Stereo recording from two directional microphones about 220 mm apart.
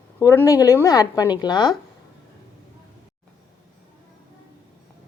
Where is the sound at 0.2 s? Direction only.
15° left (ahead or behind).